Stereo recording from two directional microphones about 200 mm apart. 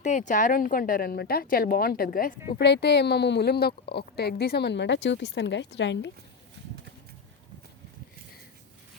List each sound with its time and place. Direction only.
0.0 s a woman's voice: 40° left (ahead or behind)
2.6 s speech: 55° left (ahead or behind)